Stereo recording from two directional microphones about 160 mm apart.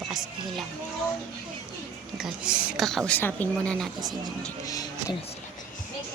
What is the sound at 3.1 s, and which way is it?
Speech, 10° left (ahead or behind).